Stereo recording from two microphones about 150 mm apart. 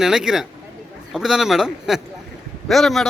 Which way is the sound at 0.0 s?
5° right (ahead or behind).